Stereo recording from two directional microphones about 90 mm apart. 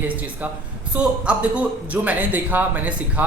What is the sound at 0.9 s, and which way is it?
A man's voice, 15° right (ahead or behind).